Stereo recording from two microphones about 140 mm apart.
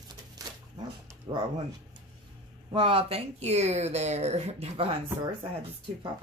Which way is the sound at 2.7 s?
40° right (ahead or behind).